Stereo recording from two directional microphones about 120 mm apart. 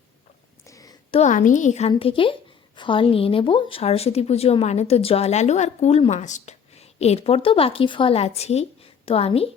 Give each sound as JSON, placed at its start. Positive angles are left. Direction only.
{"t": 0.7, "sound": "a sound", "side_deg": 30}
{"t": 1.1, "sound": "a woman's voice", "side_deg": 80}
{"t": 2.0, "sound": "speech", "side_deg": 50}
{"t": 6.1, "sound": "a woman's voice", "side_deg": 80}